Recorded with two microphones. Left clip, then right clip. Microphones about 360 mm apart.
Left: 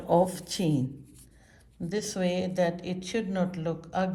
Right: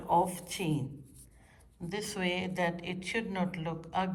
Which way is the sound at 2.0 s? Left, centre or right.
Centre.